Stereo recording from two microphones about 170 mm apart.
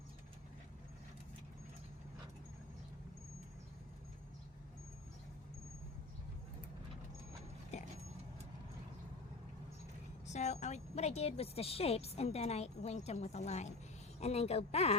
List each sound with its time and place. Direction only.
7.7 s dog: 40° left (ahead or behind)
10.2 s a woman's voice: 45° left (ahead or behind)